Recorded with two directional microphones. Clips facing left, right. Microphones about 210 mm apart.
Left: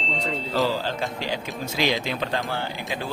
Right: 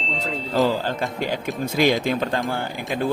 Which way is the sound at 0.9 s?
50° right (ahead or behind).